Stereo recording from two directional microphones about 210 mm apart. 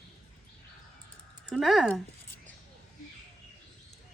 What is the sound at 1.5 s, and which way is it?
Speech, centre (ahead or behind).